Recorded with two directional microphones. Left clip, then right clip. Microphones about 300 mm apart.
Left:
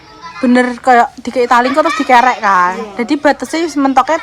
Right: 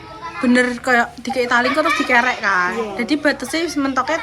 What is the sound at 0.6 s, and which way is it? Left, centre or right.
Speech, centre.